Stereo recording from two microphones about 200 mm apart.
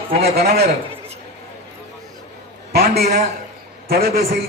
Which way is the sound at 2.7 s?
50° right (ahead or behind).